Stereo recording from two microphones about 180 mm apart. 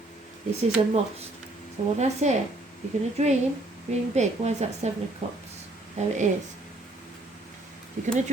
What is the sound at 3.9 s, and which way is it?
A woman's voice, 40° right (ahead or behind).